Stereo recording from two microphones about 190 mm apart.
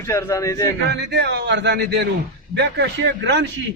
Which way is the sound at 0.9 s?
65° right (ahead or behind).